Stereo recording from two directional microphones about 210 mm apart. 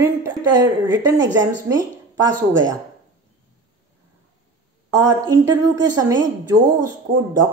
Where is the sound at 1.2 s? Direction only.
60° right (ahead or behind).